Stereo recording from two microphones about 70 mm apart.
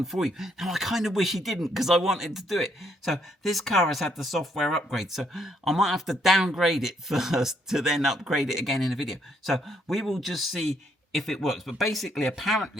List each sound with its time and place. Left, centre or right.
0.0 s speech: centre